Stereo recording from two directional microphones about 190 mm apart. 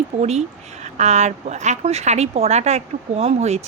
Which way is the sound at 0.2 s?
35° right (ahead or behind).